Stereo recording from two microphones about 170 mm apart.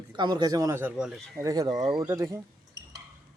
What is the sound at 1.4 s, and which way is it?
Speech, 20° right (ahead or behind).